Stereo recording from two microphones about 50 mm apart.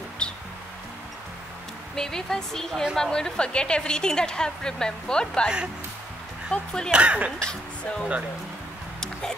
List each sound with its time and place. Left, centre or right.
0.2 s music: centre
2.0 s a woman's voice: centre
6.5 s a woman's voice: centre
6.9 s speech: right
7.3 s a woman's voice: centre